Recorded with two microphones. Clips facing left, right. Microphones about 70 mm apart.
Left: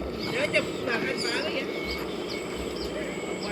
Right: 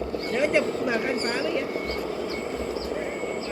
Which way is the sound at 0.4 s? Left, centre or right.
Centre.